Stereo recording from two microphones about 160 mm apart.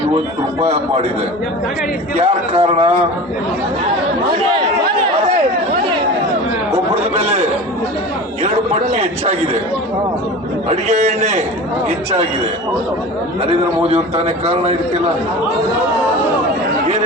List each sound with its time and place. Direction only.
0.6 s a man's voice: 40° right (ahead or behind)
2.1 s a man's voice: 40° right (ahead or behind)
7.2 s a man's voice: 40° right (ahead or behind)
8.9 s a man's voice: 45° right (ahead or behind)
10.7 s a man's voice: 45° right (ahead or behind)
13.4 s a man's voice: 40° right (ahead or behind)